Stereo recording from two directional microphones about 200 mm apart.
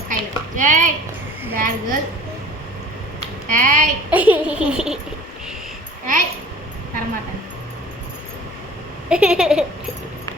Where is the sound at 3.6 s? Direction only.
40° right (ahead or behind).